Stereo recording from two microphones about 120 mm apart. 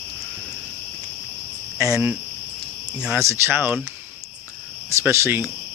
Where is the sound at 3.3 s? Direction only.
20° right (ahead or behind).